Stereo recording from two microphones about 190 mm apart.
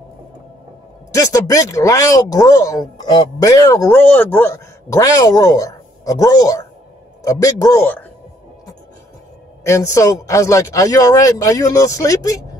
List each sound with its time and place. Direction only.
1.1 s speech: 15° left (ahead or behind)
9.6 s speech: 15° left (ahead or behind)